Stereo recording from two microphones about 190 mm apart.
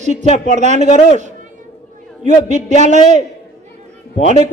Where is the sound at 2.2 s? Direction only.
40° right (ahead or behind).